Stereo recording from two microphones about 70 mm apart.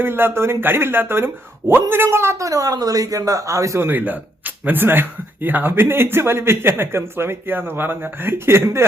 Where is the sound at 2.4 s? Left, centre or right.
Right.